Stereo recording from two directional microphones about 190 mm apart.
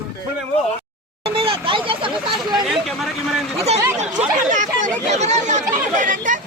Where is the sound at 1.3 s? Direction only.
30° right (ahead or behind).